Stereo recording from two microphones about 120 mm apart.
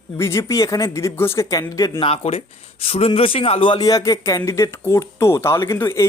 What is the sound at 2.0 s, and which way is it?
A man's voice, 55° left (ahead or behind).